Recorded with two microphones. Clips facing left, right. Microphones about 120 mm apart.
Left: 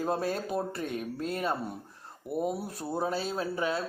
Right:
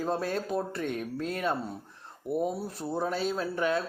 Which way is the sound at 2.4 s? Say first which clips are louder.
Even; 5° left (ahead or behind).